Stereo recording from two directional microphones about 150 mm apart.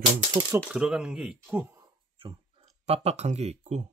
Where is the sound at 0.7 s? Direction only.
5° right (ahead or behind).